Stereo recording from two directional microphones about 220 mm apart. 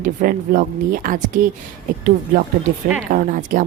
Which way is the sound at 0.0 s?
40° right (ahead or behind).